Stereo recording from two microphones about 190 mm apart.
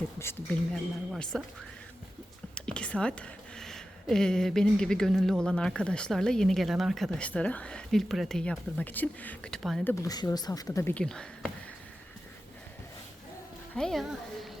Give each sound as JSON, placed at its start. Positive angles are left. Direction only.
{"t": 0.2, "sound": "speech", "side_deg": 15}
{"t": 1.1, "sound": "speech", "side_deg": 0}
{"t": 2.6, "sound": "speech", "side_deg": 5}
{"t": 9.9, "sound": "speech", "side_deg": 15}
{"t": 13.7, "sound": "speech", "side_deg": 0}